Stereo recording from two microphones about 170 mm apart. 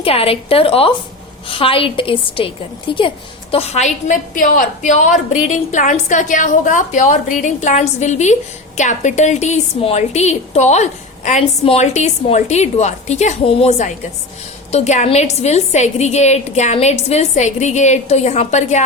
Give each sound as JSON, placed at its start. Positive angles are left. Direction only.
{"t": 0.0, "sound": "a woman's voice", "side_deg": 35}